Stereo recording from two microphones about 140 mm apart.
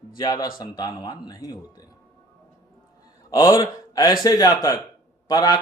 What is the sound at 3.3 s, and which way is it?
A man's voice, 25° left (ahead or behind).